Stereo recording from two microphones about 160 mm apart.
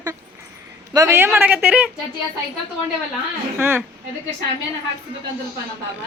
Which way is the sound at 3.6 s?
15° right (ahead or behind).